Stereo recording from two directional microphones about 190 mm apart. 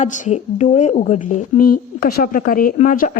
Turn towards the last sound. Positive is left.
turn(degrees=45)  # may be behind; listen again after turning